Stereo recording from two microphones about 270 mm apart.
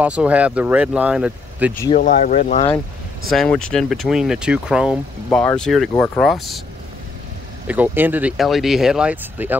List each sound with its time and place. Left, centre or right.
0.0 s speech: centre
2.0 s speech: left
3.3 s speech: centre
7.6 s speech: centre